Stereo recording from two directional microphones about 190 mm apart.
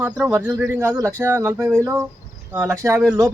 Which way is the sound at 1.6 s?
5° left (ahead or behind).